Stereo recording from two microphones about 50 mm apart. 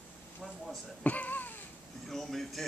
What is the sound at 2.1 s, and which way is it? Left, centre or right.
Speech, centre.